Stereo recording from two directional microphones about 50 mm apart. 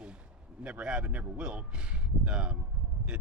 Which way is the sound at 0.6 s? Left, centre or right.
Right.